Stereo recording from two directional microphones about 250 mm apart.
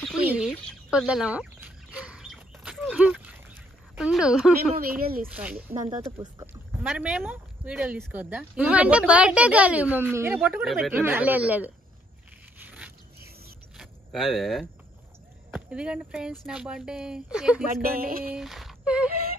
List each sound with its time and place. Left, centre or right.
0.0 s chicken: centre
3.9 s speech: centre
4.7 s speech: right
5.3 s speech: centre
12.6 s zipper: centre
13.7 s a sound: centre
15.5 s speech: centre
17.7 s speech: right
18.3 s speech: centre